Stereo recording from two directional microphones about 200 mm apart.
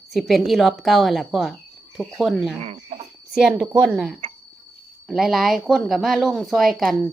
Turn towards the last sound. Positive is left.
turn(degrees=0)  # may be behind; listen again after turning